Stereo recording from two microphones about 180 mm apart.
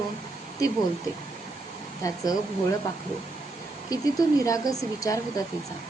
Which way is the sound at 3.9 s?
20° left (ahead or behind).